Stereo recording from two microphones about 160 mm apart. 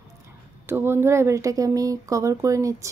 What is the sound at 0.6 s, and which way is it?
Speech, 15° right (ahead or behind).